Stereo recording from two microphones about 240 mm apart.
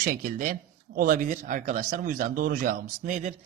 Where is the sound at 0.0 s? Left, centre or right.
Right.